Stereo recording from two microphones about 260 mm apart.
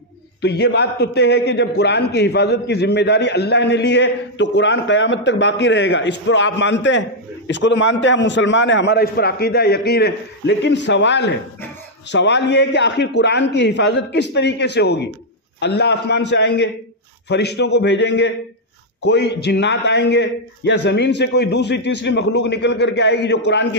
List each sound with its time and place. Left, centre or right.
0.4 s a man's voice: left